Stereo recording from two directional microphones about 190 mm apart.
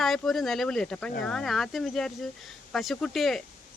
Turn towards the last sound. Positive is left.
turn(degrees=0)  # may be behind; listen again after turning